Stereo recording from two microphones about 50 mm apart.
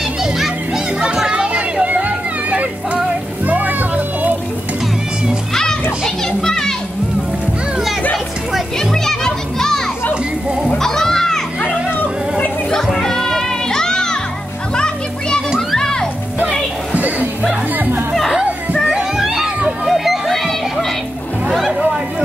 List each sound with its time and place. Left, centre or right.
1.0 s children playing: centre
2.0 s music: right
5.5 s children playing: centre
8.7 s children playing: centre
10.8 s music: centre
11.9 s a sound: left
12.8 s music: centre
14.8 s children playing: centre
15.7 s music: centre
16.3 s music: right
19.1 s a sound: centre
19.9 s music: centre
21.5 s a sound: centre